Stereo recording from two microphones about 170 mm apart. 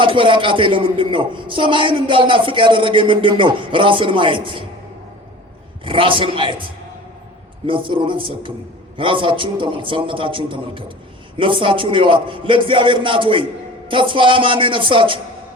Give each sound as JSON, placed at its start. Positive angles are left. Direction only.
{"t": 0.0, "sound": "speech", "side_deg": -30}
{"t": 5.8, "sound": "a man's voice", "side_deg": -30}
{"t": 7.7, "sound": "a man's voice", "side_deg": -30}